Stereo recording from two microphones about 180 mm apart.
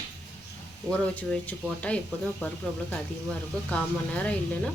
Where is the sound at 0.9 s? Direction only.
5° left (ahead or behind).